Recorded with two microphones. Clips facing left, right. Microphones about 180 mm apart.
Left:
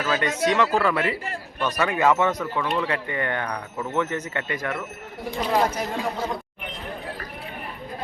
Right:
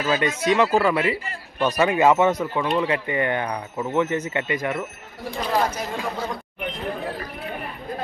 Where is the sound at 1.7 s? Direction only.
25° right (ahead or behind).